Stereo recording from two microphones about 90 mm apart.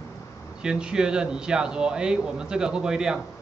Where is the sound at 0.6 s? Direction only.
10° right (ahead or behind).